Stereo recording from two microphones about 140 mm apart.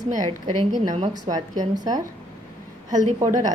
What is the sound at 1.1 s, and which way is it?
Speech, 30° right (ahead or behind).